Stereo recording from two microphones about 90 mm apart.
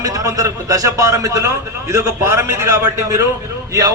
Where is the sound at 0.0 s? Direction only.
40° right (ahead or behind).